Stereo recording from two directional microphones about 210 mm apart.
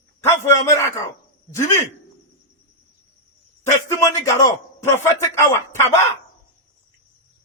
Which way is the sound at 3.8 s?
15° left (ahead or behind).